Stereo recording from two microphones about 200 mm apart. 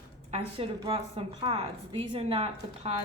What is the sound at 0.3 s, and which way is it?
A woman's voice, 30° right (ahead or behind).